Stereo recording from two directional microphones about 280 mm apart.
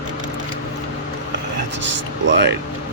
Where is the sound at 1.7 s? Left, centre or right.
Right.